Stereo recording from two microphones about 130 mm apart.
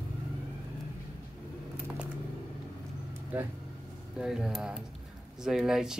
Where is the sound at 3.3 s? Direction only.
10° right (ahead or behind).